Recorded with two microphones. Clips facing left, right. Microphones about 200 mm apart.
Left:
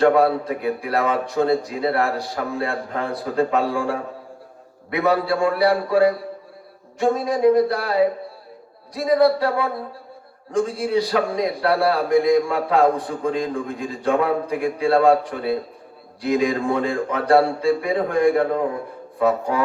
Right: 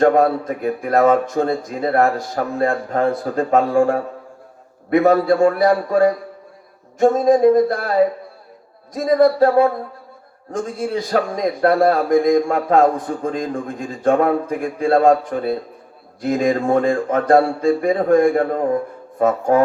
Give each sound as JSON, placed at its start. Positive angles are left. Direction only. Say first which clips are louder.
{"t": 0.0, "sound": "a man's voice", "louder": "right 2 dB", "side_deg": -45}
{"t": 10.8, "sound": "a man's voice", "louder": "right 4 dB", "side_deg": -45}